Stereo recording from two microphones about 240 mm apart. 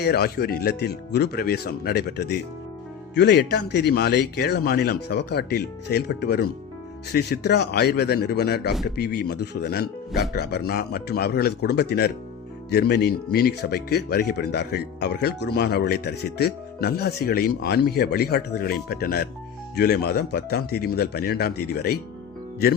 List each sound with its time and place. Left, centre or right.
0.0 s speech: left